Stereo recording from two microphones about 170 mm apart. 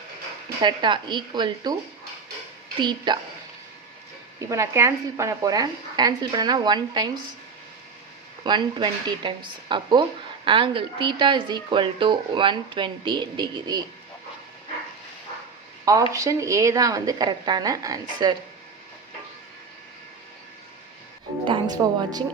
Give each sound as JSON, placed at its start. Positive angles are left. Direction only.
{"t": 0.6, "sound": "speech", "side_deg": -25}
{"t": 2.7, "sound": "speech", "side_deg": -25}
{"t": 4.4, "sound": "speech", "side_deg": -20}
{"t": 8.4, "sound": "speech", "side_deg": -25}
{"t": 15.8, "sound": "speech", "side_deg": -20}
{"t": 21.4, "sound": "speech", "side_deg": -25}